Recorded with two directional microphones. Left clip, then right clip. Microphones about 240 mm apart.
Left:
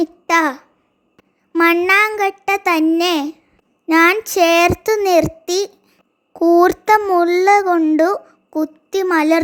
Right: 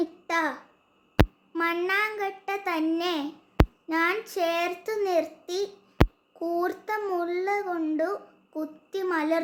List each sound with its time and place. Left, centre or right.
0.0 s a child's voice: left